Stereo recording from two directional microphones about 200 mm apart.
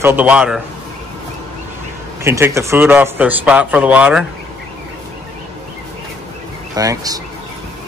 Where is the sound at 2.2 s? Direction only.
15° right (ahead or behind).